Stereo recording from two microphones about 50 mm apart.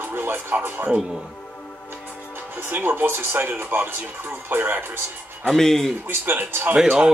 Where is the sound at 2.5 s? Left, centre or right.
Right.